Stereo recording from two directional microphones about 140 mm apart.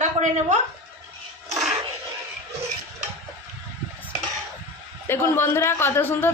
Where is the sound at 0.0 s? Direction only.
60° right (ahead or behind).